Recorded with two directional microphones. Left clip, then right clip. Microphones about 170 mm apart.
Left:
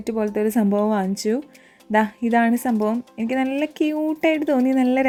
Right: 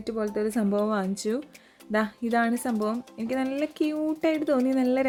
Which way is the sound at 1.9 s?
10° left (ahead or behind).